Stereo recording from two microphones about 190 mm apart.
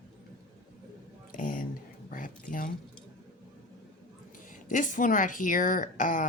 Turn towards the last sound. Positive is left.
turn(degrees=45)  # may be behind; listen again after turning